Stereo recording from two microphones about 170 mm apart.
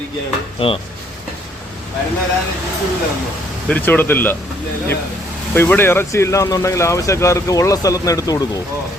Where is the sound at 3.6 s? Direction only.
10° left (ahead or behind).